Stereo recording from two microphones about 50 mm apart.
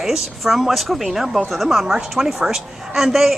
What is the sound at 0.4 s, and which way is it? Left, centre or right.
A woman's voice, centre.